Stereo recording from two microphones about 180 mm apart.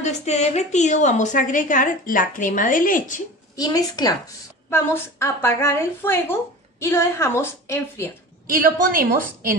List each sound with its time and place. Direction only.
0.0 s a woman's voice: 40° left (ahead or behind)
3.5 s a woman's voice: 20° left (ahead or behind)
8.5 s a woman's voice: 50° right (ahead or behind)